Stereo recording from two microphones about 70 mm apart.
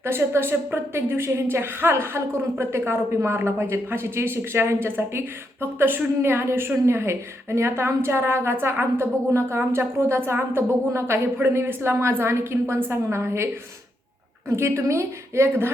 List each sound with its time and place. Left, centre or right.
0.0 s a woman's voice: right
14.5 s a woman's voice: right